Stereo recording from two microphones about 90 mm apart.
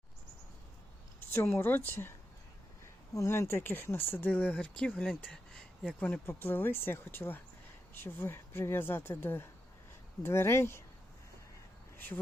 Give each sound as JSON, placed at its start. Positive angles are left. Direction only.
{"t": 1.2, "sound": "speech", "side_deg": 25}
{"t": 3.2, "sound": "speech", "side_deg": 30}
{"t": 4.9, "sound": "speech", "side_deg": 0}
{"t": 5.8, "sound": "speech", "side_deg": 15}
{"t": 11.9, "sound": "speech", "side_deg": 25}